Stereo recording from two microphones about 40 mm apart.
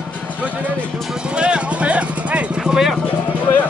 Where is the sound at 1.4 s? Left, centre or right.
Right.